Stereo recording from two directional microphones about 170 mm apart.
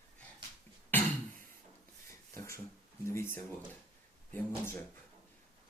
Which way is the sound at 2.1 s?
15° left (ahead or behind).